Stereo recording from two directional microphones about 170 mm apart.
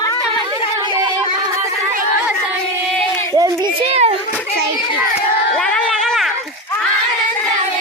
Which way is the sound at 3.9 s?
40° right (ahead or behind).